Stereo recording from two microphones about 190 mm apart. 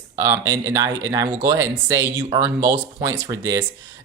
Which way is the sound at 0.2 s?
15° right (ahead or behind).